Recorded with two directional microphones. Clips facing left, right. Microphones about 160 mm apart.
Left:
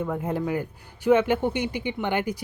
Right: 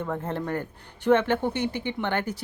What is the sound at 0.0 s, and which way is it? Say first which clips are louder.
Speech: left 3 dB; 10° left (ahead or behind).